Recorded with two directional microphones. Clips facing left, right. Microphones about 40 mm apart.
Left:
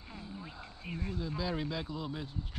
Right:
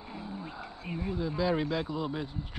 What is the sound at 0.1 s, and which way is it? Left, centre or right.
Speech, centre.